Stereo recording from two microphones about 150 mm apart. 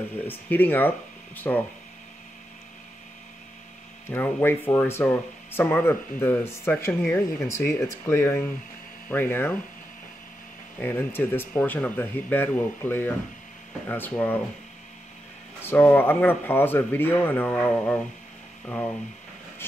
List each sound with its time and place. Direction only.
0.3 s speech: 10° left (ahead or behind)
4.1 s speech: 15° left (ahead or behind)
10.8 s speech: 15° left (ahead or behind)
15.6 s speech: 15° left (ahead or behind)